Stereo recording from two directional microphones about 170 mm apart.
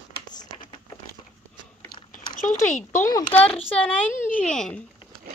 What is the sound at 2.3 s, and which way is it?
Speech, 45° left (ahead or behind).